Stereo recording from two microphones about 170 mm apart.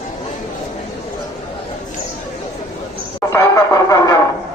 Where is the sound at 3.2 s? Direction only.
15° left (ahead or behind).